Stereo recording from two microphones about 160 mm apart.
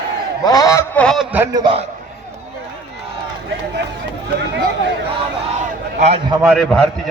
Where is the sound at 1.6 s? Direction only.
30° right (ahead or behind).